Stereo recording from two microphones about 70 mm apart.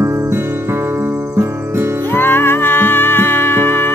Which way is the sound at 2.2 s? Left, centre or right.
Left.